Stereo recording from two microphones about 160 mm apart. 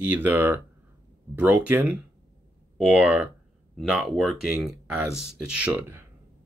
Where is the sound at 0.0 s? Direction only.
10° right (ahead or behind).